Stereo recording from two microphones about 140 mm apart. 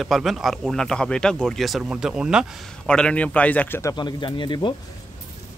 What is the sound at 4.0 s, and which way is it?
Speech, 35° left (ahead or behind).